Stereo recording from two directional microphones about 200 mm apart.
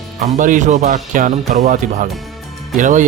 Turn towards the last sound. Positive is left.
turn(degrees=-40)  # may be behind; listen again after turning